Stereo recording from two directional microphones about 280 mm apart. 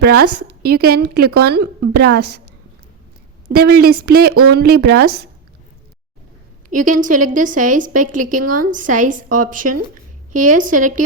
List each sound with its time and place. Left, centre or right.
0.0 s a woman's voice: right
3.5 s a woman's voice: right
6.7 s a woman's voice: right